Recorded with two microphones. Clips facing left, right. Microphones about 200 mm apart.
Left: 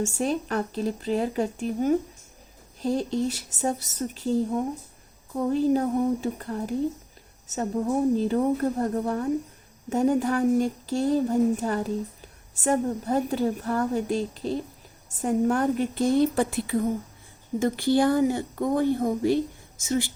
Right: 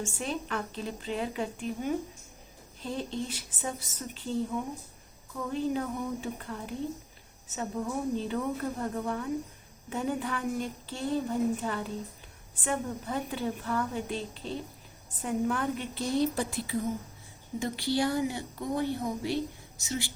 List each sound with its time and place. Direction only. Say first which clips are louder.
0.0 s speech: left 8 dB; 45° left (ahead or behind)